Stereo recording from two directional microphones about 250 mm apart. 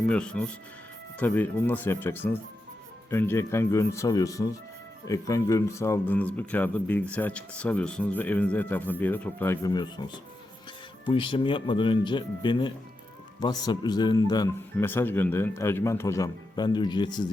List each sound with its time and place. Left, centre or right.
0.1 s speech: centre
11.1 s speech: centre